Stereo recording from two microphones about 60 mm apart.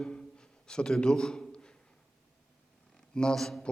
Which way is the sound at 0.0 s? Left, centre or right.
Centre.